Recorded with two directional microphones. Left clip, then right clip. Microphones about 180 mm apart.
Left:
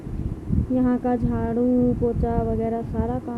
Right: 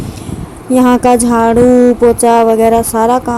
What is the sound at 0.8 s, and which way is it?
Speech, 40° right (ahead or behind).